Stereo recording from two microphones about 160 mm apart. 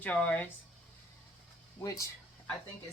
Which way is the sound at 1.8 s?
20° left (ahead or behind).